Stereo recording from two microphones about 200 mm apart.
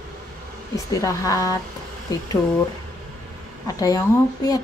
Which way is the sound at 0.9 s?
15° left (ahead or behind).